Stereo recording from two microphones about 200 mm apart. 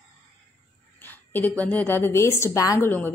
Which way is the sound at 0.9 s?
10° left (ahead or behind).